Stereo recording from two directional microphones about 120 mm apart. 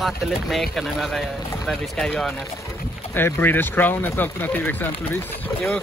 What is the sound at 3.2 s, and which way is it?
Speech, 15° left (ahead or behind).